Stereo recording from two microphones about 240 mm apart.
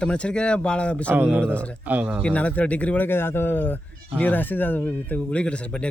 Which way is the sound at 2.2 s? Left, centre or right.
Centre.